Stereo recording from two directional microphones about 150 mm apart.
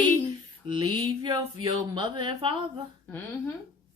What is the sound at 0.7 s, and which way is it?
A woman's voice, 35° right (ahead or behind).